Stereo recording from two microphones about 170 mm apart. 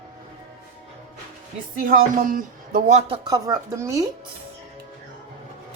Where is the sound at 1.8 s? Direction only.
50° right (ahead or behind).